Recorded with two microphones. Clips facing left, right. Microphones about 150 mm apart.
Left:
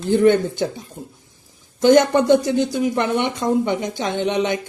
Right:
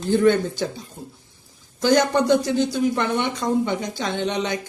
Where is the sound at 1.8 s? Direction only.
20° left (ahead or behind).